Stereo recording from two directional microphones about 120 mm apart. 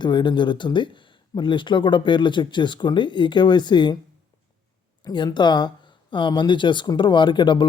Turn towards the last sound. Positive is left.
turn(degrees=45)  # may be behind; listen again after turning